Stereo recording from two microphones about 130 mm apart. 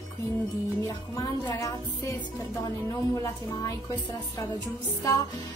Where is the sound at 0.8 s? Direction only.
25° left (ahead or behind).